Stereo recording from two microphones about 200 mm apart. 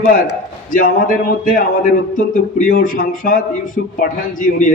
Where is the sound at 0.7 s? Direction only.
40° left (ahead or behind).